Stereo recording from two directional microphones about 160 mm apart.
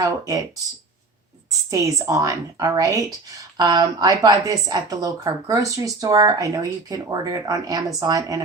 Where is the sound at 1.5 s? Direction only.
20° right (ahead or behind).